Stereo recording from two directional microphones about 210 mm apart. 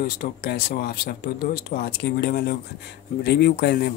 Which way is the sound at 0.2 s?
50° left (ahead or behind).